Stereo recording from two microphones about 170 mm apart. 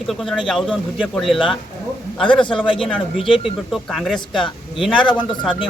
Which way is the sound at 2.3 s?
30° left (ahead or behind).